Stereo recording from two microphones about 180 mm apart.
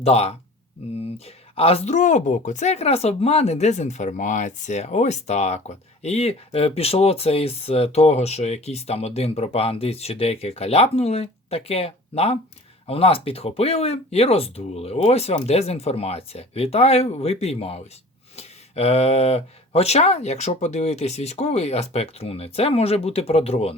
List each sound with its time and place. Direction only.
0.0 s speech: 35° left (ahead or behind)
1.5 s speech: 35° left (ahead or behind)